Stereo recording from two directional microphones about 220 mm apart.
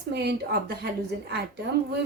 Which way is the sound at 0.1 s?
50° right (ahead or behind).